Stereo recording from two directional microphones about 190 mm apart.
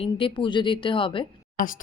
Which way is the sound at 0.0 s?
25° left (ahead or behind).